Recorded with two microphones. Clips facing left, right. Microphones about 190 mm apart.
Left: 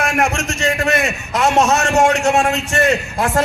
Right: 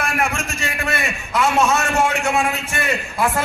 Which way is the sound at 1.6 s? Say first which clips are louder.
Left 2 dB; 40° left (ahead or behind).